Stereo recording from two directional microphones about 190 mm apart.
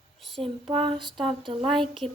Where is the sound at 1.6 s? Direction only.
Centre (ahead or behind).